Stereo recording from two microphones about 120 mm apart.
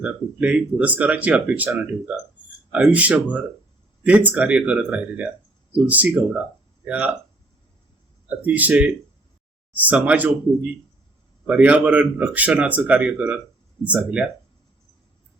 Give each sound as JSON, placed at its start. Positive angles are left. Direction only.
{"t": 0.0, "sound": "speech", "side_deg": -10}
{"t": 2.7, "sound": "speech", "side_deg": -10}
{"t": 8.3, "sound": "speech", "side_deg": -15}